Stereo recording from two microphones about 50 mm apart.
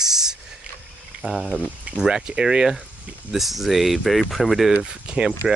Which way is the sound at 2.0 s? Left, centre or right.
Centre.